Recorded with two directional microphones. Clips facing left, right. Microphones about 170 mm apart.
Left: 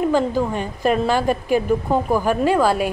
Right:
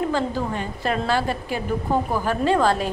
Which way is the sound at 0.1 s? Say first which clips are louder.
Left 5 dB; 15° left (ahead or behind).